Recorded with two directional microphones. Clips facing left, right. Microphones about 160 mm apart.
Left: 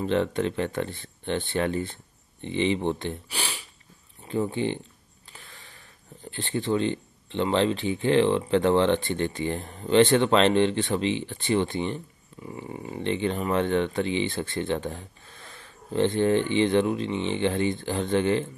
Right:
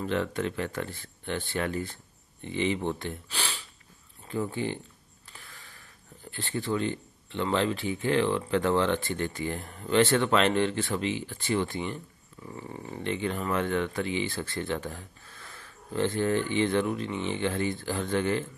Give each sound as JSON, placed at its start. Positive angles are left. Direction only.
{"t": 0.0, "sound": "speech", "side_deg": 25}
{"t": 3.3, "sound": "speech", "side_deg": 10}
{"t": 4.3, "sound": "speech", "side_deg": 25}
{"t": 5.3, "sound": "a sound", "side_deg": 20}
{"t": 6.3, "sound": "speech", "side_deg": 20}
{"t": 13.0, "sound": "speech", "side_deg": 25}